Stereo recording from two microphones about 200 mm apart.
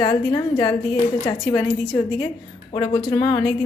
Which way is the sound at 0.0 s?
20° left (ahead or behind).